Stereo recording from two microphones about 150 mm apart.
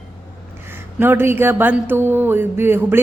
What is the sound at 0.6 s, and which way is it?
Speech, 15° right (ahead or behind).